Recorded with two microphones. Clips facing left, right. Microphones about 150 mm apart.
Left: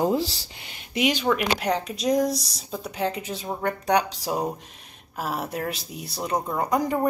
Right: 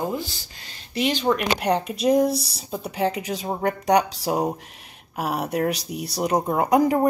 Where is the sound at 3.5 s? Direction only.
35° right (ahead or behind).